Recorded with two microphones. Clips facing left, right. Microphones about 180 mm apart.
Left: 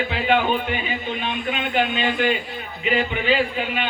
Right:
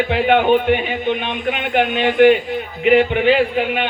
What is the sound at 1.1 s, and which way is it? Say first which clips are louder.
Speech: right 6 dB; 20° right (ahead or behind).